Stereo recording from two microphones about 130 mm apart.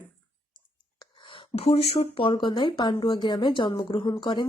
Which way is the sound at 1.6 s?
50° left (ahead or behind).